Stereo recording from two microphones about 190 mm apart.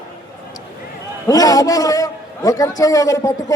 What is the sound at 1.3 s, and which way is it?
A man's voice, 20° left (ahead or behind).